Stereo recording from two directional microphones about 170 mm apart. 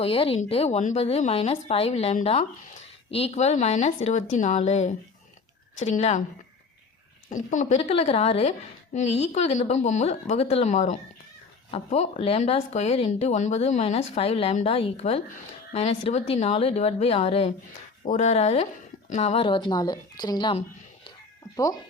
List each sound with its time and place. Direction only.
0.0 s a woman's voice: 35° left (ahead or behind)
7.3 s a woman's voice: 45° left (ahead or behind); by 21.8 s 20° left (ahead or behind)